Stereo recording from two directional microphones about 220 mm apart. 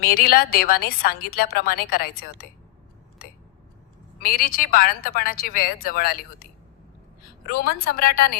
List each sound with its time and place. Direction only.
0.0 s a woman's voice: 45° left (ahead or behind)
4.2 s a woman's voice: 40° left (ahead or behind)
7.4 s a woman's voice: 45° left (ahead or behind)